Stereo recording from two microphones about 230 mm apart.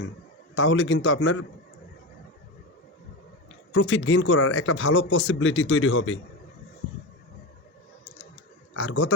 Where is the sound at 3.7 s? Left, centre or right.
Left.